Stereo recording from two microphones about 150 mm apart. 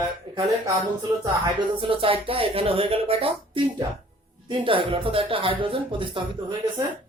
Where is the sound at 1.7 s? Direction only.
35° right (ahead or behind).